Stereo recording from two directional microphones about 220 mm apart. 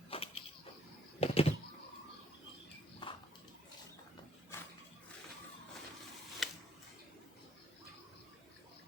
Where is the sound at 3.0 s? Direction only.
20° left (ahead or behind).